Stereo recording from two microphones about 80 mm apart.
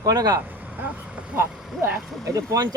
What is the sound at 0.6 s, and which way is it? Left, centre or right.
Speech, right.